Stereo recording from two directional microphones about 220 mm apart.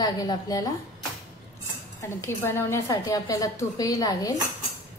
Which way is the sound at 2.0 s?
10° left (ahead or behind).